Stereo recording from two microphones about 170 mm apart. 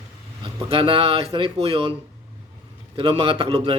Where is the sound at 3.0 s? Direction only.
30° right (ahead or behind).